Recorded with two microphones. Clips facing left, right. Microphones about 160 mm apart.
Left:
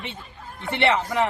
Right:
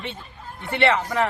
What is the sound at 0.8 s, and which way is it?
Speech, 15° left (ahead or behind).